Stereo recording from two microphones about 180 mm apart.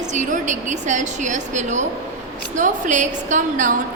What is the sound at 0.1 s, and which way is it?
A woman's voice, 40° right (ahead or behind).